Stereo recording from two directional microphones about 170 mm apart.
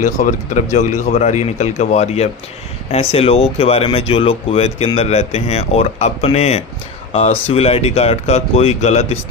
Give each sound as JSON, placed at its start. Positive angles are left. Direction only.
{"t": 0.0, "sound": "speech", "side_deg": 45}